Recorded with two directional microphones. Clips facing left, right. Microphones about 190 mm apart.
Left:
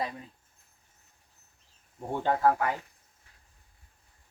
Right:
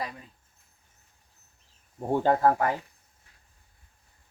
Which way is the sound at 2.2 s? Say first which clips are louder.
Right 2 dB; 40° right (ahead or behind).